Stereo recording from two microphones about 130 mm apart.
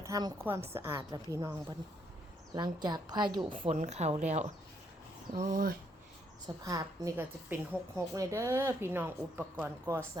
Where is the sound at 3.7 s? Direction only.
60° right (ahead or behind); by 5.7 s 85° right.